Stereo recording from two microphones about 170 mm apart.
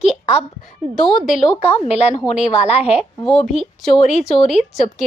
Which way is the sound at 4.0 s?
45° left (ahead or behind).